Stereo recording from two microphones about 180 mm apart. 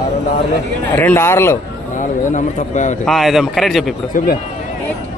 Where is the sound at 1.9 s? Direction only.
45° left (ahead or behind).